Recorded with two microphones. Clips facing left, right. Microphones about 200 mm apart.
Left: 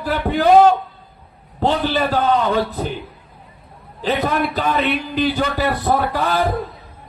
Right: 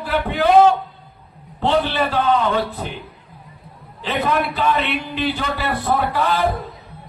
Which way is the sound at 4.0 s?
40° left (ahead or behind).